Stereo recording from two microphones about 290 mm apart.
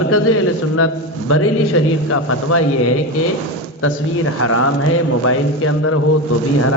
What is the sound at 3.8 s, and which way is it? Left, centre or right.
A man's voice, left.